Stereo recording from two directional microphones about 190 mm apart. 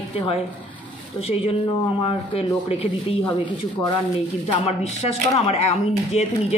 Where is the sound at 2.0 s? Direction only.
30° left (ahead or behind).